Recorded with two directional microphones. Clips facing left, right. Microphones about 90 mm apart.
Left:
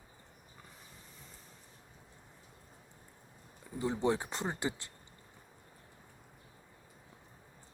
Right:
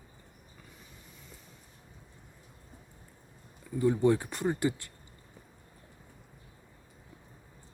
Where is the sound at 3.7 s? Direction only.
20° left (ahead or behind).